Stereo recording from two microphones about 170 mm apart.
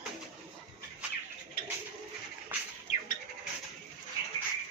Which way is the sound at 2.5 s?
10° right (ahead or behind).